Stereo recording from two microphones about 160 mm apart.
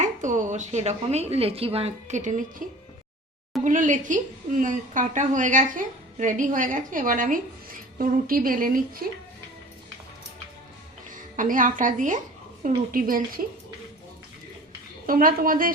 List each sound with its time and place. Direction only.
0.0 s a woman's voice: 50° right (ahead or behind); by 9.2 s 65° right (ahead or behind)
11.1 s a woman's voice: 55° right (ahead or behind)
15.0 s a woman's voice: 60° right (ahead or behind)